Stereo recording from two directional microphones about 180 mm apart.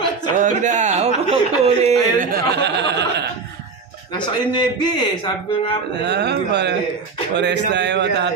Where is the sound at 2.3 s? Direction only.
70° right (ahead or behind).